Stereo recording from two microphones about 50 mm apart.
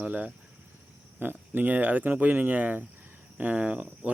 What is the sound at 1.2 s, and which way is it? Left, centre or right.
Speech, right.